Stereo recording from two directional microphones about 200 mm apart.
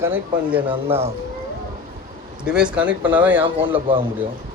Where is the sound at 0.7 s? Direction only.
30° right (ahead or behind).